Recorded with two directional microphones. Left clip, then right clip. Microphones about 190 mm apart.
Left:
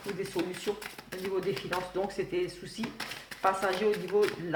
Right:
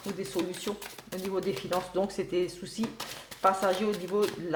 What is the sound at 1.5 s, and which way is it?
Speech, 40° right (ahead or behind).